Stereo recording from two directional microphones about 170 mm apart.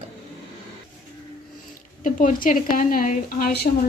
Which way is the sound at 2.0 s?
50° left (ahead or behind).